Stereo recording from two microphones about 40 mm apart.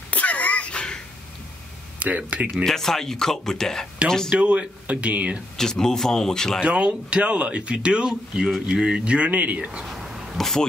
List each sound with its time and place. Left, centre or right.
0.1 s a sound: left
2.0 s speech: right
2.5 s speech: centre
4.3 s speech: right
5.6 s speech: centre
6.6 s speech: right
9.9 s a sound: centre
10.3 s speech: centre